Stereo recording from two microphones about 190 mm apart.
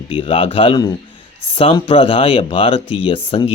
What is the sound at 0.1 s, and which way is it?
Speech, 30° left (ahead or behind).